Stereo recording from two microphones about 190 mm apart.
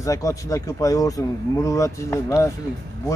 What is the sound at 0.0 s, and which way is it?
Speech, 15° left (ahead or behind).